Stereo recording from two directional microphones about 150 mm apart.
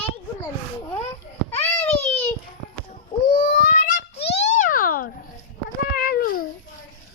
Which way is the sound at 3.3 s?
65° left (ahead or behind).